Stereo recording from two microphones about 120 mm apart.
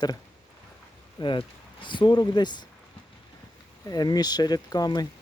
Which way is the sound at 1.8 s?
40° left (ahead or behind).